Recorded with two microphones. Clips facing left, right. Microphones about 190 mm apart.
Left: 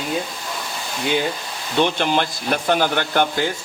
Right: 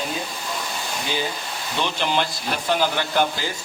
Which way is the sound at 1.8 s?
55° left (ahead or behind).